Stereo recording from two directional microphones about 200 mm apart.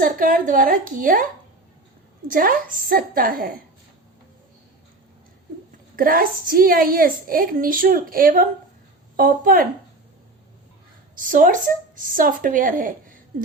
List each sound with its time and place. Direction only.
0.0 s a woman's voice: 45° right (ahead or behind)
2.3 s a woman's voice: 45° right (ahead or behind)
6.0 s a woman's voice: 45° right (ahead or behind)
11.1 s a woman's voice: 40° right (ahead or behind)